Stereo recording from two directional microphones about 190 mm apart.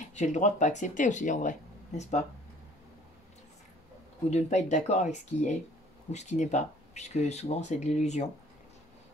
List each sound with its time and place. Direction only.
0.1 s speech: 40° left (ahead or behind)
4.3 s speech: 40° left (ahead or behind)